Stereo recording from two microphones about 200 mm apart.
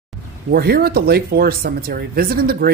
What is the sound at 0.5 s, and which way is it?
Speech, 50° right (ahead or behind).